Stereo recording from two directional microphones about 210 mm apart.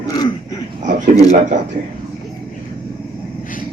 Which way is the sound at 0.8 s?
35° right (ahead or behind).